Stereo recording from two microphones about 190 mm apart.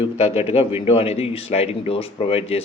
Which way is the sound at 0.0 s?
35° left (ahead or behind).